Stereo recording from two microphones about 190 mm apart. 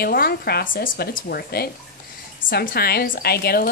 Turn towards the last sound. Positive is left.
turn(degrees=55)  # may be behind; listen again after turning